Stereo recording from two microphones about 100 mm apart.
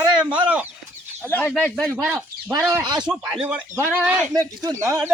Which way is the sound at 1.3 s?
15° left (ahead or behind).